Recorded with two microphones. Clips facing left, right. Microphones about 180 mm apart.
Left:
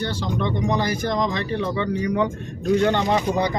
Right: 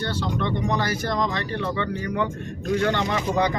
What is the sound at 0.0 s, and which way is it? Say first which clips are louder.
Speech: left 1 dB; 15° left (ahead or behind).